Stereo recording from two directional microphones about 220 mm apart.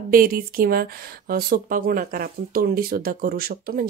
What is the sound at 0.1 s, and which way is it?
A woman's voice, 40° right (ahead or behind).